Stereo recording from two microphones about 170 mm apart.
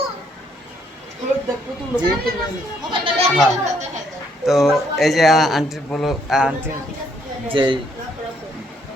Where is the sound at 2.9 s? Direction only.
30° right (ahead or behind).